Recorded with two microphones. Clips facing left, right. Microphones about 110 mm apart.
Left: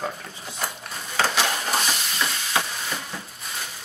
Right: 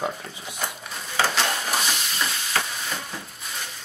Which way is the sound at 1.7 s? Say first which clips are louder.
Left 1 dB; centre (ahead or behind).